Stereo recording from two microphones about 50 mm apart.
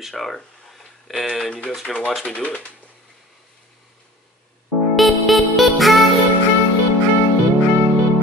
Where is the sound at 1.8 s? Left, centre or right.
Centre.